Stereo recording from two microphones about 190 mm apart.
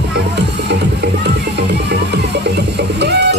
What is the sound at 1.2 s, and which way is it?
Music, 65° right (ahead or behind).